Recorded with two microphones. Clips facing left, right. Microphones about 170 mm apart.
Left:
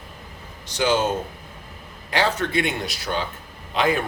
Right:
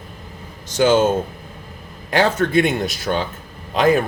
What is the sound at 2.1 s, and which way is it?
Speech, 45° right (ahead or behind).